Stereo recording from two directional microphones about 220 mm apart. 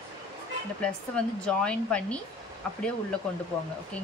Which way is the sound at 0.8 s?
5° left (ahead or behind).